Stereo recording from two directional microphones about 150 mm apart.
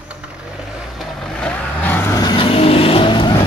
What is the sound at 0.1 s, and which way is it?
Vehicle, 5° right (ahead or behind).